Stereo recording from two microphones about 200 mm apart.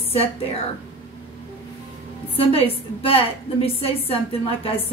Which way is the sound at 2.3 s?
30° left (ahead or behind).